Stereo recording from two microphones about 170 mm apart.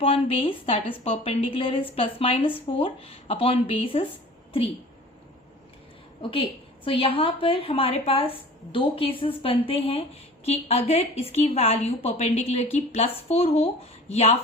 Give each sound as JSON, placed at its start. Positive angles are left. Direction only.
{"t": 0.0, "sound": "a woman's voice", "side_deg": 35}
{"t": 6.3, "sound": "a woman's voice", "side_deg": 30}